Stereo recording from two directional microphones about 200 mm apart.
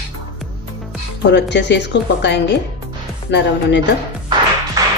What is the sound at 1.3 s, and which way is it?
Speech, 60° left (ahead or behind).